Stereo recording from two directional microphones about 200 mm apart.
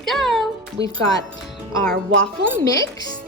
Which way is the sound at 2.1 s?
75° right (ahead or behind).